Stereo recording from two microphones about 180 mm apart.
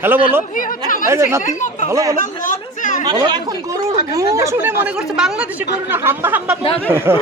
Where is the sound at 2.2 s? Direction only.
45° left (ahead or behind).